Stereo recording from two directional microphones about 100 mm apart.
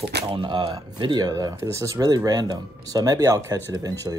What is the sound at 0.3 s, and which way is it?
Speech, 55° right (ahead or behind).